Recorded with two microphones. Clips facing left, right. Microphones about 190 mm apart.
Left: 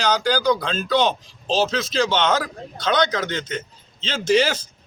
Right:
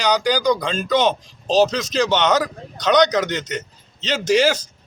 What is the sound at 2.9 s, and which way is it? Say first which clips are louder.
A man's voice: right 5 dB; 15° right (ahead or behind).